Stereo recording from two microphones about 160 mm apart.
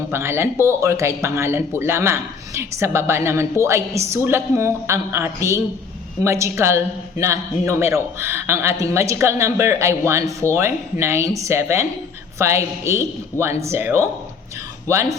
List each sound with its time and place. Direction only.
0.1 s speech: 15° right (ahead or behind)